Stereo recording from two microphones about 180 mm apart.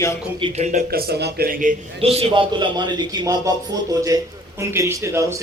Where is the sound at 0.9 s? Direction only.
60° right (ahead or behind).